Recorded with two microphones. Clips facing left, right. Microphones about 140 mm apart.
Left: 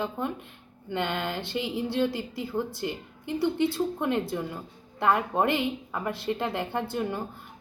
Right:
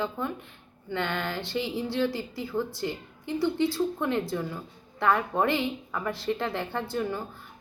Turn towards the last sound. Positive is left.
turn(degrees=20)  # may be behind; listen again after turning